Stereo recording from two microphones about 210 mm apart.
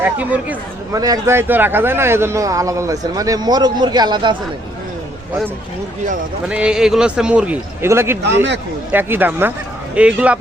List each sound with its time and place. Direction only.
0.0 s a man's voice: 10° right (ahead or behind)
6.5 s a man's voice: 5° right (ahead or behind)
8.2 s a man's voice: 55° right (ahead or behind)
8.9 s a man's voice: 10° right (ahead or behind)